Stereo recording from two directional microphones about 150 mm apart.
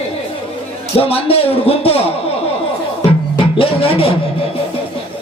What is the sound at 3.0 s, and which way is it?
Music, 35° left (ahead or behind).